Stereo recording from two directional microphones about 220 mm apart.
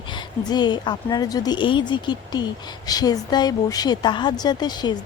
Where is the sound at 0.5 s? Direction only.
20° left (ahead or behind).